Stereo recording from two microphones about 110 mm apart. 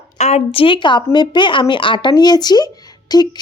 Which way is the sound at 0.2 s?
90° left.